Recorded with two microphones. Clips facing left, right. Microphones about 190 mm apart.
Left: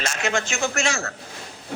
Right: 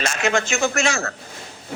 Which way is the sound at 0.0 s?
60° right (ahead or behind).